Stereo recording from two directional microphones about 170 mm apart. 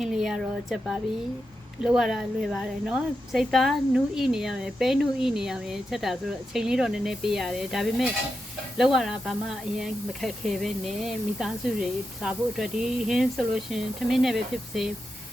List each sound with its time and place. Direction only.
0.0 s a woman's voice: centre (ahead or behind)